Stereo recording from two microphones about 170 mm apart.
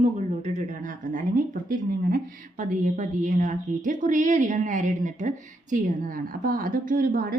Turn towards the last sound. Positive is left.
turn(degrees=-60)  # may be behind; listen again after turning